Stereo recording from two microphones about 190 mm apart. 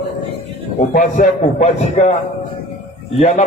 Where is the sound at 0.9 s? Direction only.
40° left (ahead or behind).